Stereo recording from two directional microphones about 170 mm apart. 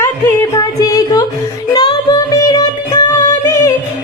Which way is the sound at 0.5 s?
20° left (ahead or behind).